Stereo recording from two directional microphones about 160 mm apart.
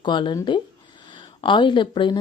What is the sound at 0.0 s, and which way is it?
Speech, 30° left (ahead or behind).